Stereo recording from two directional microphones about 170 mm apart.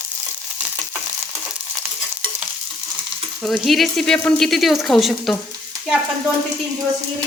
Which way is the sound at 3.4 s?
Centre (ahead or behind).